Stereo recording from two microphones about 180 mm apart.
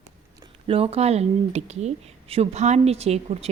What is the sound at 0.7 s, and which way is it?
Speech, 30° right (ahead or behind).